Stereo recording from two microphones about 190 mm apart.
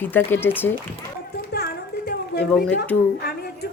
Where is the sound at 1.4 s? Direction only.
55° left (ahead or behind).